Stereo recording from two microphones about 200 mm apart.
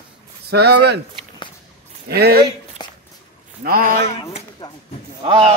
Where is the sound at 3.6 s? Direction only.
45° right (ahead or behind).